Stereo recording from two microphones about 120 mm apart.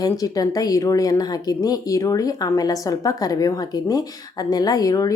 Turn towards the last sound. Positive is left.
turn(degrees=30)  # may be behind; listen again after turning